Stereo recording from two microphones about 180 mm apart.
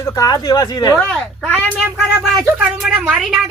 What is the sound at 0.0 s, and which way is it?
Speech, 20° left (ahead or behind).